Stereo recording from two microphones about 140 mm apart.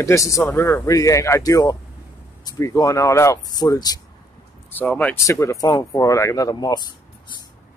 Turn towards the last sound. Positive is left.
turn(degrees=30)  # may be behind; listen again after turning